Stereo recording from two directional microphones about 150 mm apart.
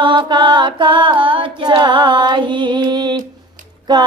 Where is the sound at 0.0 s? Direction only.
30° right (ahead or behind).